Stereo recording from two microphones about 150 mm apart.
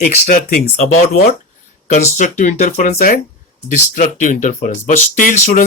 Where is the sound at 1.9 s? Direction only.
55° left (ahead or behind).